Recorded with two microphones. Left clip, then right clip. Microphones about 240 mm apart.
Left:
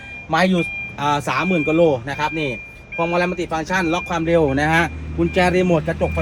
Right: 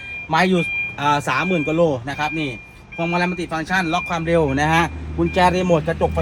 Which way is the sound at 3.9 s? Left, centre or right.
Right.